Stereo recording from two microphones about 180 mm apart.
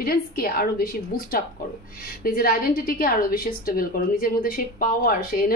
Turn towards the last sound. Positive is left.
turn(degrees=55)  # may be behind; listen again after turning